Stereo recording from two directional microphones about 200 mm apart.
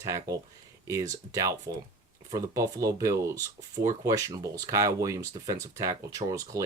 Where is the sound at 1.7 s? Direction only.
15° right (ahead or behind).